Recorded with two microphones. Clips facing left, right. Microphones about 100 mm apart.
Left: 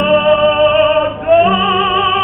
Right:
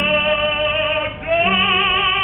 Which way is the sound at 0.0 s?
35° left (ahead or behind).